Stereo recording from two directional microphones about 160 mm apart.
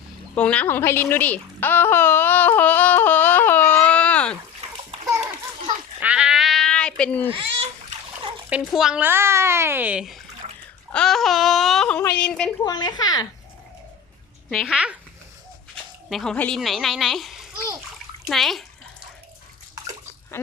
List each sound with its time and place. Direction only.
0.3 s speech: 10° left (ahead or behind)
6.0 s bleat: 5° right (ahead or behind); by 7.3 s 10° left (ahead or behind)
7.3 s a child's voice: 40° right (ahead or behind)
8.4 s a child's voice: 5° right (ahead or behind)
10.4 s splash: 45° right (ahead or behind)
10.9 s speech: 5° left (ahead or behind)
12.6 s speech: 25° left (ahead or behind)
14.5 s speech: 5° right (ahead or behind)
20.4 s a sound: 15° left (ahead or behind)